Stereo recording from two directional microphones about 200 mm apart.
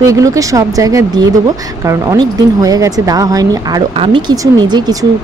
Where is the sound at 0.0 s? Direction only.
15° right (ahead or behind).